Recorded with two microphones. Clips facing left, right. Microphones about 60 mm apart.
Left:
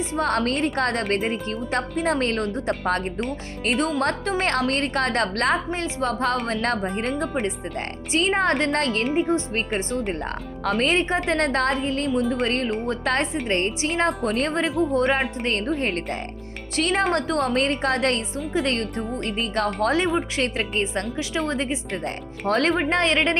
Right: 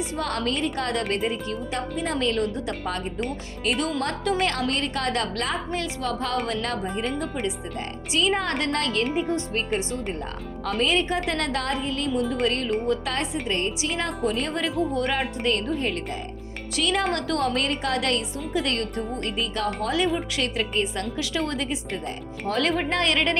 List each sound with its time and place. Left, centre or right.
0.2 s a woman's voice: left
5.7 s a woman's voice: left
6.1 s a woman's voice: left
6.8 s speech: left
7.4 s a woman's voice: left
9.1 s a woman's voice: left
10.1 s a woman's voice: left
16.7 s a woman's voice: left
19.4 s speech: left
20.3 s a woman's voice: left
22.0 s speech: left
22.9 s a woman's voice: left